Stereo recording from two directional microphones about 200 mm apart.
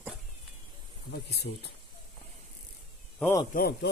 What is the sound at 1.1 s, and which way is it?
Speech, 55° left (ahead or behind).